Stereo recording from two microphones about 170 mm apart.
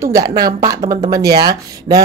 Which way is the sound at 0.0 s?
20° right (ahead or behind).